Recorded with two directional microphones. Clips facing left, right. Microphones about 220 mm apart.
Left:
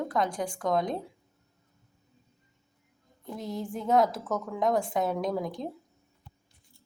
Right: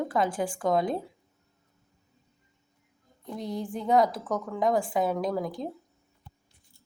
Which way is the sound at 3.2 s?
Centre (ahead or behind).